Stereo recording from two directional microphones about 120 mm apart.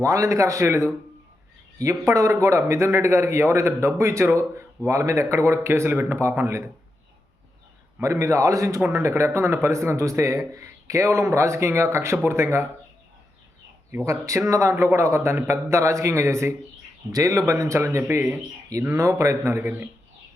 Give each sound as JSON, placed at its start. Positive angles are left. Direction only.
{"t": 0.0, "sound": "speech", "side_deg": -25}
{"t": 8.0, "sound": "speech", "side_deg": -25}
{"t": 13.9, "sound": "speech", "side_deg": -25}